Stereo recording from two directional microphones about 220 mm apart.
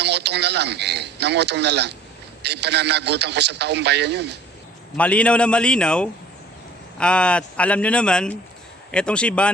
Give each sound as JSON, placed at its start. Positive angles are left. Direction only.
{"t": 0.0, "sound": "a man's voice", "side_deg": -50}
{"t": 4.9, "sound": "speech", "side_deg": 5}